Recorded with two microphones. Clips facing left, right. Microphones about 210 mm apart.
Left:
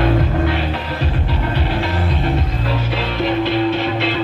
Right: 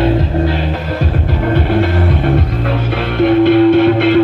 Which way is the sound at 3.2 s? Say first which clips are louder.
Right 10 dB; 55° right (ahead or behind).